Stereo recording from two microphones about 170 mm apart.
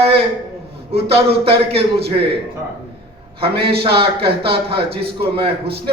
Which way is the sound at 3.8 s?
30° right (ahead or behind).